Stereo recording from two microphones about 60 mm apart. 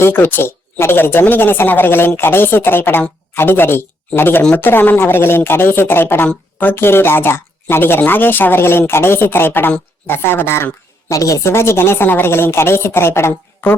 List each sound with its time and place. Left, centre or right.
0.0 s speech: left
11.1 s a woman's voice: left
11.5 s speech: left